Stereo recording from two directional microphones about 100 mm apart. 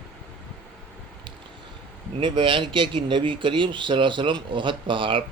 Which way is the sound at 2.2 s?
55° right (ahead or behind).